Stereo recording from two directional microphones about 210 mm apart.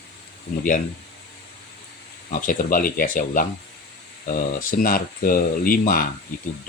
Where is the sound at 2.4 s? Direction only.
40° left (ahead or behind).